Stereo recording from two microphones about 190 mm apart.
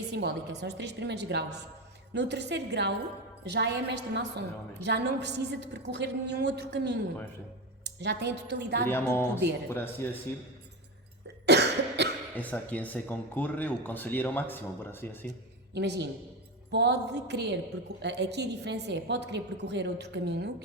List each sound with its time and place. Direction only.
0.1 s a woman's voice: 65° right (ahead or behind)
8.0 s a woman's voice: 60° right (ahead or behind)
8.9 s speech: 10° left (ahead or behind)
11.4 s cough: 65° right (ahead or behind)
12.4 s speech: 10° left (ahead or behind)
15.7 s a woman's voice: 65° right (ahead or behind)